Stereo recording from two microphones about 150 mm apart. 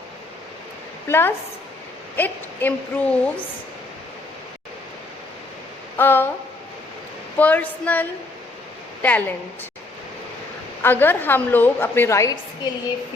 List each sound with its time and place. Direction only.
1.0 s a woman's voice: 15° left (ahead or behind)
6.0 s a woman's voice: 15° left (ahead or behind)
7.3 s a woman's voice: 10° left (ahead or behind)
10.8 s a woman's voice: 15° left (ahead or behind)